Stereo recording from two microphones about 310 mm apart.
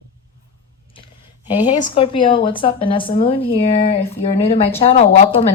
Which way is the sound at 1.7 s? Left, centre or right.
Left.